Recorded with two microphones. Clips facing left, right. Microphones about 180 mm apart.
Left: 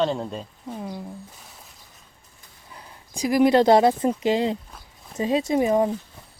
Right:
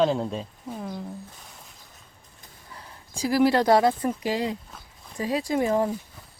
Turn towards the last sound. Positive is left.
turn(degrees=15)  # may be behind; listen again after turning